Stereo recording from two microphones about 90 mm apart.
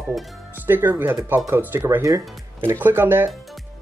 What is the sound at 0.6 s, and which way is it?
Speech, 20° right (ahead or behind).